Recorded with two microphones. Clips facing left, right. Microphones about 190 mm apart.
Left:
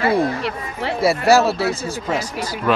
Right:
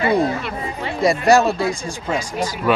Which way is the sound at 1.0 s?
5° left (ahead or behind).